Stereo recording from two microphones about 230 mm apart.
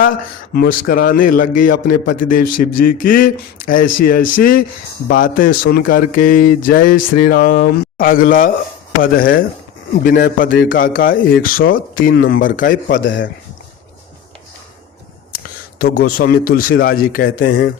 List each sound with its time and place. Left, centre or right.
0.5 s a man's voice: left
12.9 s speech: left
15.8 s a man's voice: left